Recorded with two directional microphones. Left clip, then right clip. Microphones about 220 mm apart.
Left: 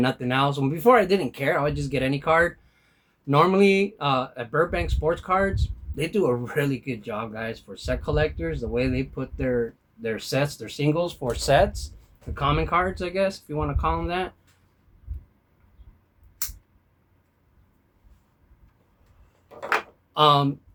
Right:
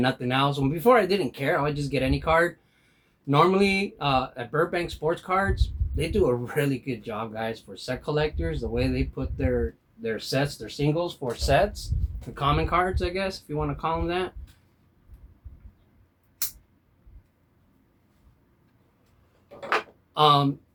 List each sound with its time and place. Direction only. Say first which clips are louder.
0.0 s speech: left 1 dB; 20° left (ahead or behind)
12.3 s speech: left 1 dB; 15° left (ahead or behind)
20.1 s speech: left 1 dB; 20° left (ahead or behind)